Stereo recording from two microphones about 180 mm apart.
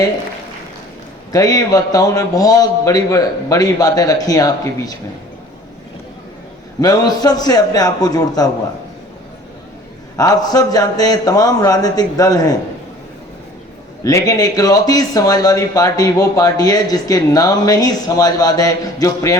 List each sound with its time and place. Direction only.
1.3 s speech: 20° left (ahead or behind)
6.8 s speech: 20° left (ahead or behind)
10.2 s speech: 20° left (ahead or behind)
14.0 s speech: 20° left (ahead or behind)